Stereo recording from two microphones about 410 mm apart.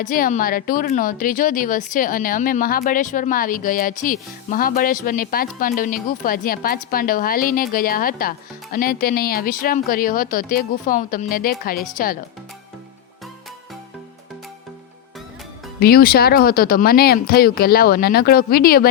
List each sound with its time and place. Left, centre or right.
0.0 s speech: centre
15.8 s speech: left